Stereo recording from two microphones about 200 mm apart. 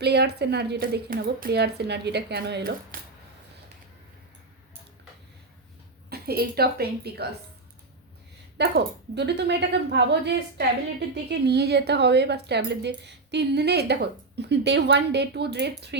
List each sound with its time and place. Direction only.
0.0 s speech: 55° right (ahead or behind)
6.1 s a woman's voice: 50° right (ahead or behind)
8.5 s speech: 55° right (ahead or behind)